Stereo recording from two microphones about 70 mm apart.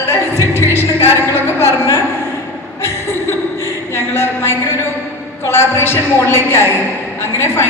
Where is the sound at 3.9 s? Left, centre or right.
Left.